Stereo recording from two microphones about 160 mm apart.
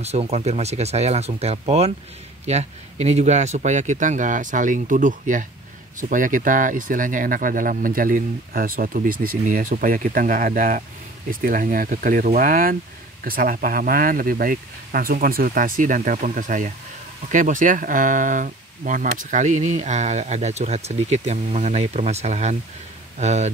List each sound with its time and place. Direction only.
0.0 s speech: 40° right (ahead or behind)